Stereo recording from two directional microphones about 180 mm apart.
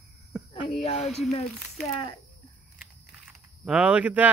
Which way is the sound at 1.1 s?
Centre (ahead or behind).